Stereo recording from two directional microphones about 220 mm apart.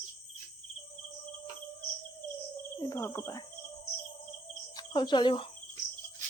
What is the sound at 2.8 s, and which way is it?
Speech, 10° left (ahead or behind).